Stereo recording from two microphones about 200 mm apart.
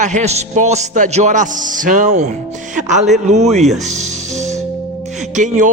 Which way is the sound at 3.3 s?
35° right (ahead or behind).